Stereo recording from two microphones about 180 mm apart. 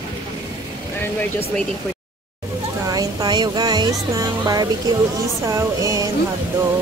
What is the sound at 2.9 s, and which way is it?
Speech, 25° right (ahead or behind).